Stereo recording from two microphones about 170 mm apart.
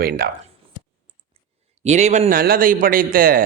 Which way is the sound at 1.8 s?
45° right (ahead or behind).